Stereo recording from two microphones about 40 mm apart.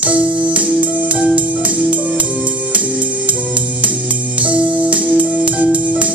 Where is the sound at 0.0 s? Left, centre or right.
Right.